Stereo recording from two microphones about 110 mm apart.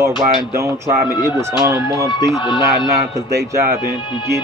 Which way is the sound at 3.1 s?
30° right (ahead or behind).